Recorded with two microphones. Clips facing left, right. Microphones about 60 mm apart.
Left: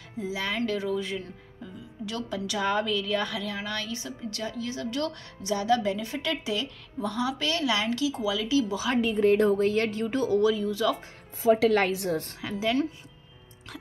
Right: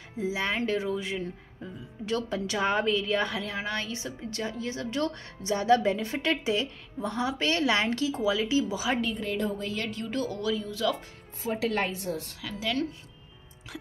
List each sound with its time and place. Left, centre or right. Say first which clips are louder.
0.3 s speech: even; right
1.6 s speech: left 2 dB; right
8.6 s a woman's voice: left 2 dB; centre
9.1 s speech: left 9 dB; left
9.9 s speech: left 6 dB; left
10.4 s speech: left 5 dB; centre
11.8 s a woman's voice: left 5 dB; left
12.1 s a woman's voice: left 4 dB; left
12.4 s speech: left 4 dB; left